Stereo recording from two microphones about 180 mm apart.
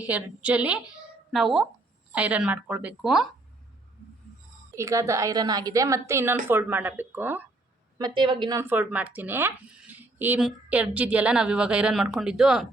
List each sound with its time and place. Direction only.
0.0 s speech: 10° right (ahead or behind)
4.7 s speech: 15° right (ahead or behind)
7.9 s speech: 25° right (ahead or behind); by 12.6 s 5° right (ahead or behind)